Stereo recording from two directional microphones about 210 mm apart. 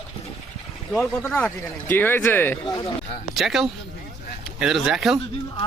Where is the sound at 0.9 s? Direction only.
5° left (ahead or behind).